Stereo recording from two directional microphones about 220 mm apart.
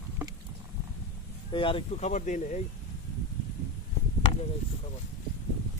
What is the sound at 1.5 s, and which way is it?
Speech, 20° left (ahead or behind).